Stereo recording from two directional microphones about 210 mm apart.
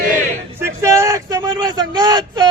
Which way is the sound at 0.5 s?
15° right (ahead or behind).